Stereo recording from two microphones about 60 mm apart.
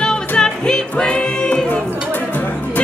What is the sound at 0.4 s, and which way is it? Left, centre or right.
Music, centre.